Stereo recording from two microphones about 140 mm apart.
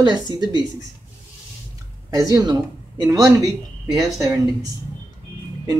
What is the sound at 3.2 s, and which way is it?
Speech, 5° right (ahead or behind).